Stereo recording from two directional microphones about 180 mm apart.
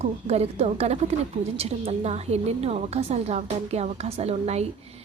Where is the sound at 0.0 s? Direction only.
35° right (ahead or behind).